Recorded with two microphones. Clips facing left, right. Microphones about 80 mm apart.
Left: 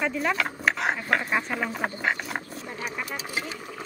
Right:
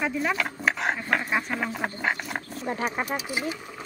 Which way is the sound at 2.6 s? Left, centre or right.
Right.